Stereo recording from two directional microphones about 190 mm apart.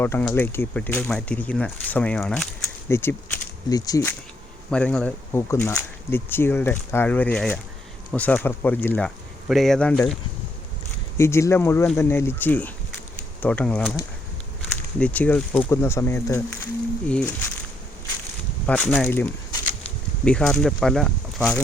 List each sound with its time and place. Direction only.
0.0 s speech: 10° left (ahead or behind)
2.9 s speech: 10° left (ahead or behind)
4.7 s speech: 5° left (ahead or behind)
11.2 s speech: 15° left (ahead or behind)
18.6 s speech: 5° left (ahead or behind)